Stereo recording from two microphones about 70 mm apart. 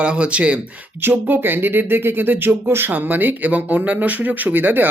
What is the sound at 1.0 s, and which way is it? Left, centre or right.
Speech, right.